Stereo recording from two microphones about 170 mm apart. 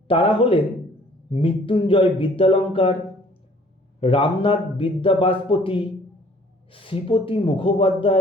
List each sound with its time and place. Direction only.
0.1 s speech: 30° left (ahead or behind)
4.0 s speech: 30° left (ahead or behind)